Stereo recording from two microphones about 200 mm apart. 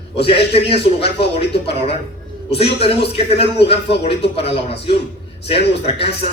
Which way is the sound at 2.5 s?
30° left (ahead or behind).